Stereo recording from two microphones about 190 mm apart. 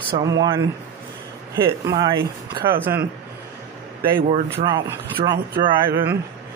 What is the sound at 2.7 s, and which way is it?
Speech, 10° right (ahead or behind).